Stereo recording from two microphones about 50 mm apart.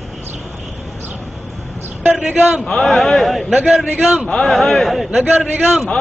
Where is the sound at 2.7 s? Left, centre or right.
Centre.